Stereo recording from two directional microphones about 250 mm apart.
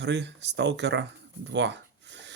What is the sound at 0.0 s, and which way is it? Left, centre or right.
Speech, right.